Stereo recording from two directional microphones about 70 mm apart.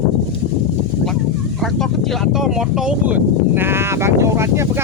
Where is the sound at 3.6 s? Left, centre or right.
Right.